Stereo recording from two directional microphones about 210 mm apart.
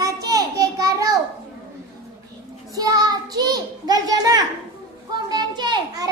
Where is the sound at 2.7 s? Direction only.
15° right (ahead or behind).